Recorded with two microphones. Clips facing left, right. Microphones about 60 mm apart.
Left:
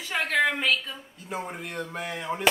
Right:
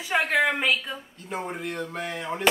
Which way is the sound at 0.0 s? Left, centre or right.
Centre.